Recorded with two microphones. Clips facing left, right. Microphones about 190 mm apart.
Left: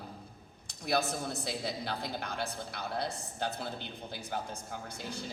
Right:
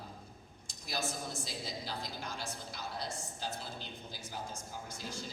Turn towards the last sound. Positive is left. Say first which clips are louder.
# left 3 dB
turn(degrees=60)  # may be behind; listen again after turning